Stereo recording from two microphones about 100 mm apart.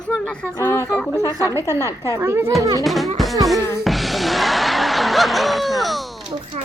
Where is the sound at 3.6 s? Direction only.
30° left (ahead or behind).